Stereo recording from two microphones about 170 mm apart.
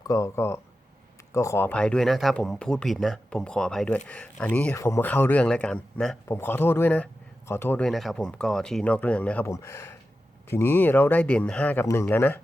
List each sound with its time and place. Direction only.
0.1 s speech: 15° left (ahead or behind)